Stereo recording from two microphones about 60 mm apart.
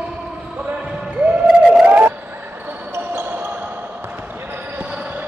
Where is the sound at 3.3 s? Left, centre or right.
Right.